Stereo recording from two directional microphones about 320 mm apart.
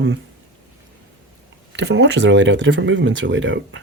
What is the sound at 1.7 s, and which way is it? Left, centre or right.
Speech, right.